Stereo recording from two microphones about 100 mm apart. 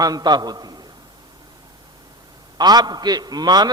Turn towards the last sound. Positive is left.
turn(degrees=-45)  # may be behind; listen again after turning